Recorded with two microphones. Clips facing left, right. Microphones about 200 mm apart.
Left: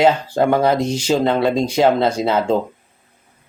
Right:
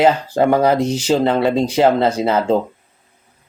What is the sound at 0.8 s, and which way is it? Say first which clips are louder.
Speech: right 2 dB; 35° right (ahead or behind).